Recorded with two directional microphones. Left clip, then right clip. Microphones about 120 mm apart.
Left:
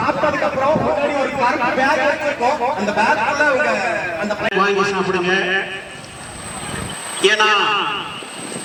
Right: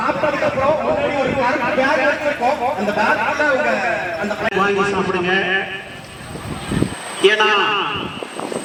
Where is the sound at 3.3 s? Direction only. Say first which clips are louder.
Left 1 dB; 40° left (ahead or behind).